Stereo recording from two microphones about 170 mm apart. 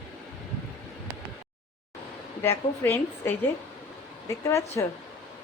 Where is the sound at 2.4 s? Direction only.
15° left (ahead or behind).